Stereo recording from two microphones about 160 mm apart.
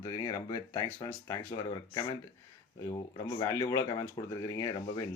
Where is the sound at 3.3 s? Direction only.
20° left (ahead or behind).